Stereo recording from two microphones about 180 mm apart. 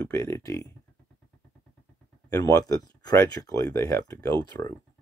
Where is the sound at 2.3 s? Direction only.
15° left (ahead or behind).